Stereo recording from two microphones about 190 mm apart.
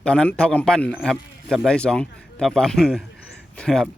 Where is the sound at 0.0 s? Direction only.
5° left (ahead or behind).